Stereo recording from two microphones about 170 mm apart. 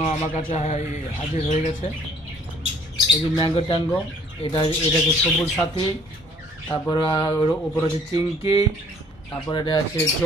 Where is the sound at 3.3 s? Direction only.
25° left (ahead or behind).